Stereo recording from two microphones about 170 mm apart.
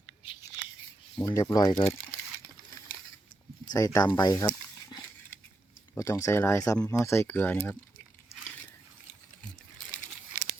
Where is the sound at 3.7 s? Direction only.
20° left (ahead or behind).